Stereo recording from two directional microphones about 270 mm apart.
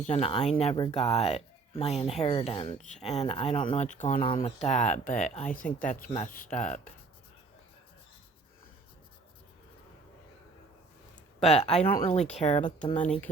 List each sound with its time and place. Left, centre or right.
0.1 s speech: left
11.5 s speech: left